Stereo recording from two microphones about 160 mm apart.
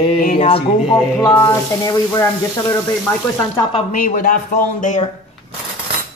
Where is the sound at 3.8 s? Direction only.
55° left (ahead or behind).